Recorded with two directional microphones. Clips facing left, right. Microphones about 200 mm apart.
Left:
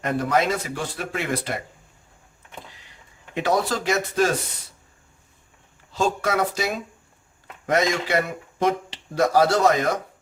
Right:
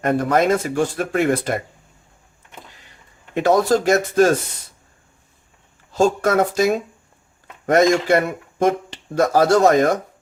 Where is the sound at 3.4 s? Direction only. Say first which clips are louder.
Right 7 dB; 45° right (ahead or behind).